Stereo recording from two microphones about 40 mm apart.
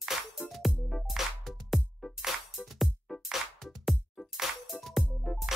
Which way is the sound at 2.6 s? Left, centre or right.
Centre.